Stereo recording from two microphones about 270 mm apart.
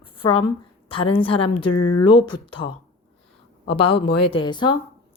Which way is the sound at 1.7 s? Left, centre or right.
Left.